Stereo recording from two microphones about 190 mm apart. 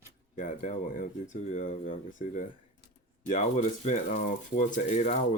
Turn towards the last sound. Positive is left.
turn(degrees=35)  # may be behind; listen again after turning